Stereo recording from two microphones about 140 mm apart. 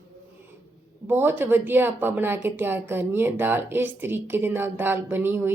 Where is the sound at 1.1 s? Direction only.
15° right (ahead or behind).